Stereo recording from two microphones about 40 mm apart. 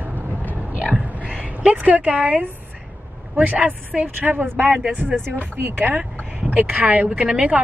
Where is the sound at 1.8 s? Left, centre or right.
Right.